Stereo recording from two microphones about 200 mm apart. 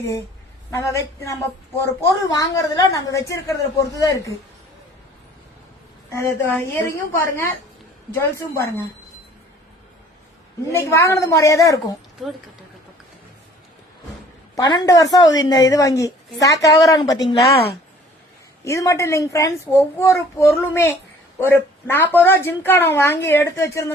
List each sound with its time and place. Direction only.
0.7 s a woman's voice: 15° left (ahead or behind)
6.1 s a woman's voice: 15° left (ahead or behind)
8.2 s a woman's voice: 15° left (ahead or behind)
10.7 s a woman's voice: 15° left (ahead or behind)
14.5 s a woman's voice: 20° left (ahead or behind)
17.2 s a woman's voice: 25° left (ahead or behind)
18.6 s a woman's voice: 15° left (ahead or behind)